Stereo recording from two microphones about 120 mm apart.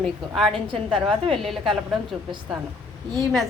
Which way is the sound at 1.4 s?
Centre (ahead or behind).